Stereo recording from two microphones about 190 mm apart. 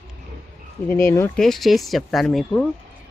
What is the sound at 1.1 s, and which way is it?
Speech, 10° left (ahead or behind).